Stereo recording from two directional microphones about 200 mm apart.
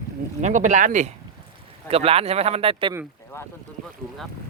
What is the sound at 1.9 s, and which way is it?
Boat, 30° right (ahead or behind).